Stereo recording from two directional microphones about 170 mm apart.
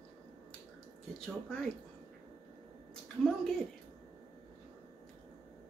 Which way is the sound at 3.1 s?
5° left (ahead or behind).